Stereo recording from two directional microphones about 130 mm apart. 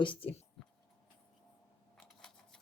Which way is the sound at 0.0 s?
45° left (ahead or behind).